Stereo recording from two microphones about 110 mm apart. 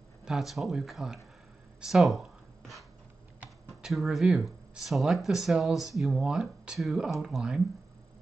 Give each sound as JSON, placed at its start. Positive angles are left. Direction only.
{"t": 0.2, "sound": "speech", "side_deg": -5}
{"t": 3.8, "sound": "speech", "side_deg": 0}